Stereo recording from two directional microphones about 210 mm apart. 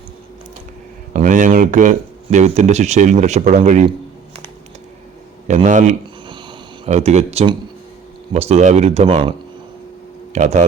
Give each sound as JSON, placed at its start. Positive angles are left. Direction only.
{"t": 1.1, "sound": "speech", "side_deg": -40}
{"t": 5.5, "sound": "speech", "side_deg": -35}
{"t": 10.3, "sound": "speech", "side_deg": -35}